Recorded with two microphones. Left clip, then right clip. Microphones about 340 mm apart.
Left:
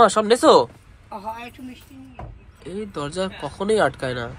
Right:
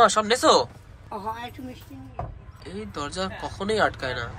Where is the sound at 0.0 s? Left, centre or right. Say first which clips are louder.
Left 4 dB; centre.